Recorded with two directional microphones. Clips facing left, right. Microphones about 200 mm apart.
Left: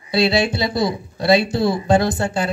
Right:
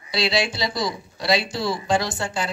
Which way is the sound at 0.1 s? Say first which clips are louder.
Left 6 dB; 55° left (ahead or behind).